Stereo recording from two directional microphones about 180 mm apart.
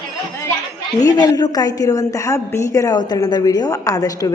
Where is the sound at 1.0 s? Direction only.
20° left (ahead or behind).